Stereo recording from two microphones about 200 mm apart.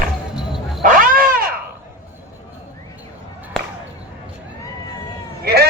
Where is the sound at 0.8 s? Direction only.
45° right (ahead or behind).